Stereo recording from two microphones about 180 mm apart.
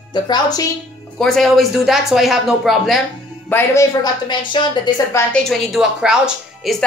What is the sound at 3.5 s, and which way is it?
Speech, 15° left (ahead or behind).